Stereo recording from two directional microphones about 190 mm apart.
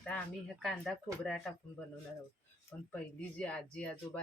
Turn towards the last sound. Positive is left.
turn(degrees=5)  # may be behind; listen again after turning